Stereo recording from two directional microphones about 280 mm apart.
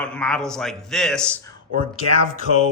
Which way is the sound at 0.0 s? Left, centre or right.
Centre.